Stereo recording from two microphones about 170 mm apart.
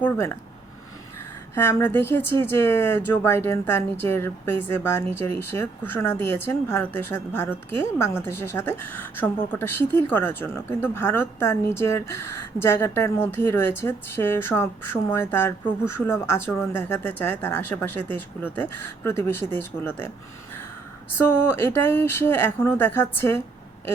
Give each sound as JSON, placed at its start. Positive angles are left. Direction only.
{"t": 0.0, "sound": "speech", "side_deg": 15}
{"t": 1.5, "sound": "speech", "side_deg": 15}
{"t": 21.2, "sound": "speech", "side_deg": 15}